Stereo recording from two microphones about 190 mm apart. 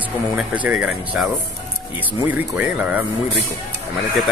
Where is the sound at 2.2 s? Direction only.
10° right (ahead or behind).